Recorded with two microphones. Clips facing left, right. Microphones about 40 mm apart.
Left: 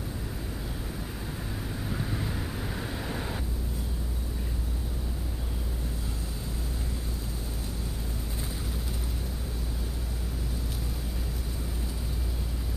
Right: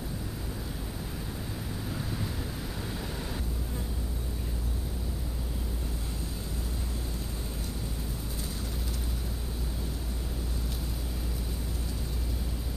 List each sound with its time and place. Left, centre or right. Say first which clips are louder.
1.9 s vehicle: left 3 dB; centre